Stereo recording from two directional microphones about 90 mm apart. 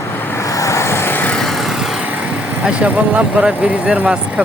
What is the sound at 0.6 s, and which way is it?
Vehicle, 35° left (ahead or behind).